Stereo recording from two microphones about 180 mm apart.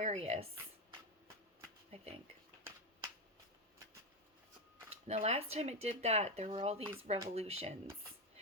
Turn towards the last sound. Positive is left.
turn(degrees=-35)  # may be behind; listen again after turning